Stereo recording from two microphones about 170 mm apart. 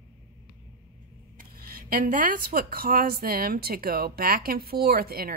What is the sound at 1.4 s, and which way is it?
Speech, 55° right (ahead or behind).